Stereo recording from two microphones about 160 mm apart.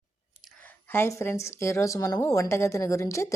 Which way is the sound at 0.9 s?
15° left (ahead or behind).